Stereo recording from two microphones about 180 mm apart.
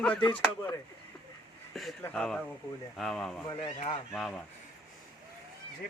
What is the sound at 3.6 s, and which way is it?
Speech, 35° left (ahead or behind).